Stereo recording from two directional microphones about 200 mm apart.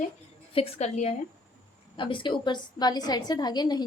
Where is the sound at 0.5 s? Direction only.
30° left (ahead or behind).